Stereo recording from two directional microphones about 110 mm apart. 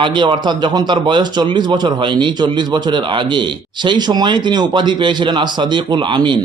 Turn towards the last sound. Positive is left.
turn(degrees=-45)  # may be behind; listen again after turning